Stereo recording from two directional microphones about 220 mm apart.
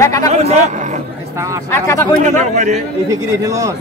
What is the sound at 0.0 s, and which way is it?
Speech, 15° left (ahead or behind).